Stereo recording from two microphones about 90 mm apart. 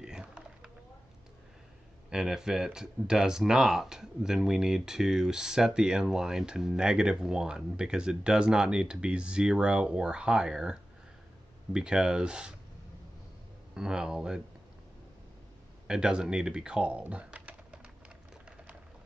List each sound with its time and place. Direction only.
0.0 s a sound: 10° right (ahead or behind)
2.0 s speech: 5° right (ahead or behind)
13.7 s speech: 10° right (ahead or behind)
15.9 s speech: 10° right (ahead or behind)